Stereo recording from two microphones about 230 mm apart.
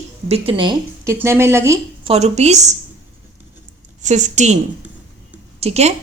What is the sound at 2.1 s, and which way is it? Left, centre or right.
Speech, right.